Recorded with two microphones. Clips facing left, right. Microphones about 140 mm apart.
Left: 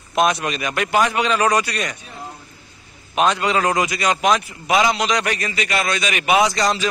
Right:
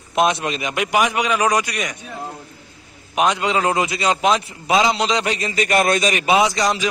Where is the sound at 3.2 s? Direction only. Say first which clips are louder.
Even; 15° right (ahead or behind).